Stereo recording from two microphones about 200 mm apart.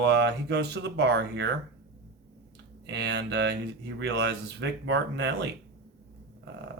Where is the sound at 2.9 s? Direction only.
55° right (ahead or behind).